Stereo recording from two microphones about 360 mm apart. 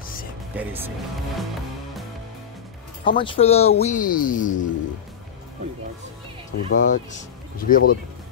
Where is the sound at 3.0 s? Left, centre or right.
Centre.